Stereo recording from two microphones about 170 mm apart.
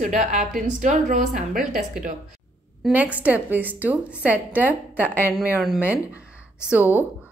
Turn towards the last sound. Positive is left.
turn(degrees=-10)  # may be behind; listen again after turning